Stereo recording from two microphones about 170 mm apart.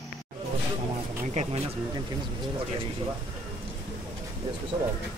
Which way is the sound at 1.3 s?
40° right (ahead or behind).